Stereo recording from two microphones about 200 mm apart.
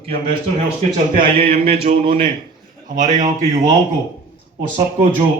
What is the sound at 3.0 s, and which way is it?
Speech, 40° right (ahead or behind).